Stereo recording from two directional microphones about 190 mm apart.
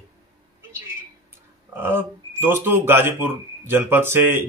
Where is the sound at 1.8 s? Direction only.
10° right (ahead or behind).